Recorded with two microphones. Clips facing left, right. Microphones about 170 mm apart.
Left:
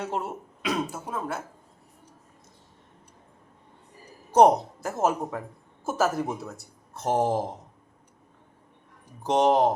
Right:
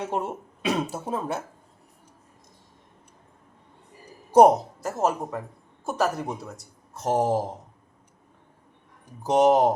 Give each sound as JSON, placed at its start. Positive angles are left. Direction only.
{"t": 0.0, "sound": "speech", "side_deg": -15}
{"t": 4.4, "sound": "speech", "side_deg": -5}
{"t": 9.2, "sound": "speech", "side_deg": -5}